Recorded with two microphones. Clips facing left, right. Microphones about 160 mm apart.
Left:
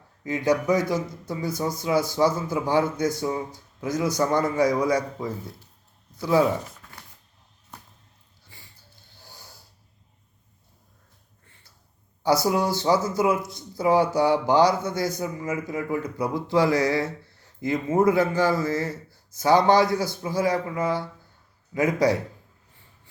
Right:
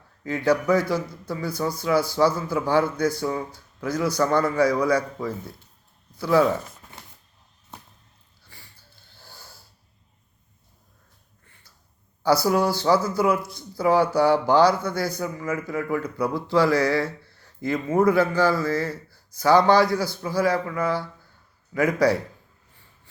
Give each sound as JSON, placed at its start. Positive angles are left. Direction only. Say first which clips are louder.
{"t": 0.3, "sound": "speech", "louder": "right 1 dB", "side_deg": 20}
{"t": 6.9, "sound": "shuffling cards", "louder": "right 2 dB", "side_deg": -20}
{"t": 8.5, "sound": "dog", "louder": "right 1 dB", "side_deg": 20}
{"t": 9.0, "sound": "snort", "louder": "right 1 dB", "side_deg": 15}
{"t": 12.2, "sound": "speech", "louder": "right 2 dB", "side_deg": 20}